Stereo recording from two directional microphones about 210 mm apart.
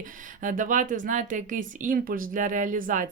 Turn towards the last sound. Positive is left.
turn(degrees=-40)  # may be behind; listen again after turning